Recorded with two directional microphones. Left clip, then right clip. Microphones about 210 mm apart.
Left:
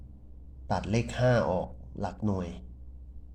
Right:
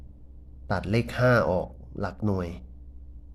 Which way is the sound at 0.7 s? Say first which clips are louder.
Right 3 dB; 25° right (ahead or behind).